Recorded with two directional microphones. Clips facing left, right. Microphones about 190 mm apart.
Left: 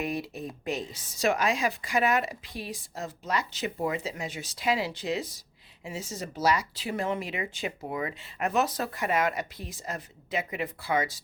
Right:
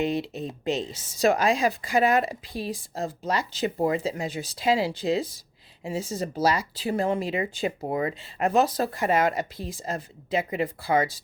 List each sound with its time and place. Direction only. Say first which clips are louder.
0.0 s speech: right 5 dB; 25° right (ahead or behind)